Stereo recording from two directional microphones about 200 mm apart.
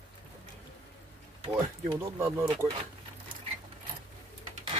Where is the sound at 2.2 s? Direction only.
10° right (ahead or behind).